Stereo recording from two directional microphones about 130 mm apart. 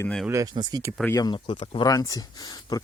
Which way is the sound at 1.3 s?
40° left (ahead or behind).